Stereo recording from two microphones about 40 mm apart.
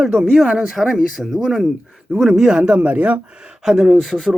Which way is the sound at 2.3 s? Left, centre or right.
Centre.